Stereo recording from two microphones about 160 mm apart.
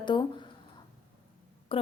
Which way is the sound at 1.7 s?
35° left (ahead or behind).